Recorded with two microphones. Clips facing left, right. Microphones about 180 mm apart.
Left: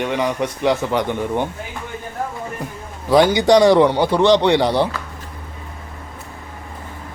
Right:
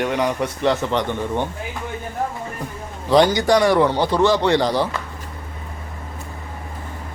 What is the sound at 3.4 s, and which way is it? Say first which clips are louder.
Speech: left 4 dB; 25° left (ahead or behind).